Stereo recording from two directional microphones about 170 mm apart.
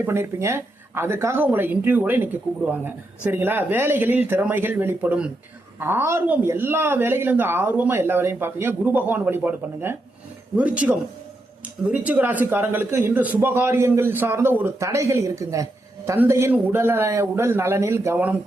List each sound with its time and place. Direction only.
0.0 s speech: 15° right (ahead or behind)